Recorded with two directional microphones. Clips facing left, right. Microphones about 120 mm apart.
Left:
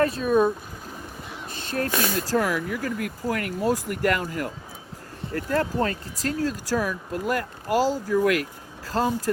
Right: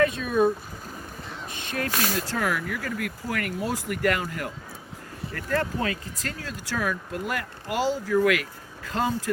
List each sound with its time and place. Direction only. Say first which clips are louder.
0.0 s speech: left 2 dB; 35° left (ahead or behind)
1.5 s speech: left 3 dB; 35° left (ahead or behind)
2.1 s speech: left 3 dB; 45° left (ahead or behind)
5.3 s speech: left 3 dB; 35° left (ahead or behind)